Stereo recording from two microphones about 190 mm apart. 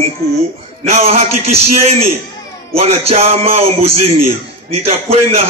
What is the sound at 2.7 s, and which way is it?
A man's voice, 30° right (ahead or behind).